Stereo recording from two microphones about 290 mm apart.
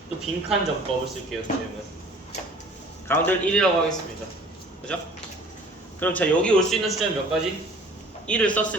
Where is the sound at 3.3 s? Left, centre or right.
Centre.